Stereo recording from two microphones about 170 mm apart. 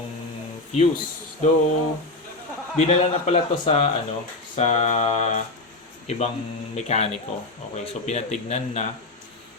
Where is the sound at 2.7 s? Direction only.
40° left (ahead or behind).